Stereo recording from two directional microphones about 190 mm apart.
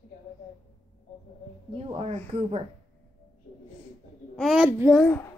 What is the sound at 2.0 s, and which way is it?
Speech, 35° right (ahead or behind).